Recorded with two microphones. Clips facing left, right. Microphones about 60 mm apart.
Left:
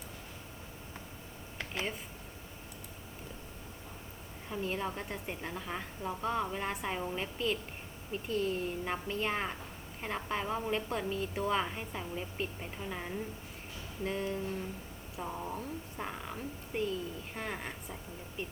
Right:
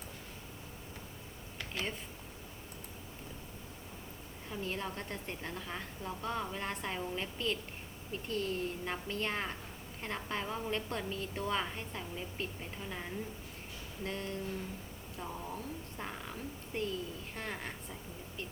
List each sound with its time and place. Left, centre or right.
4.4 s a woman's voice: centre